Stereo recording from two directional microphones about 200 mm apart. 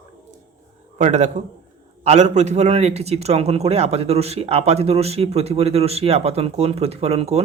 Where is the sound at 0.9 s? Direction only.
35° right (ahead or behind).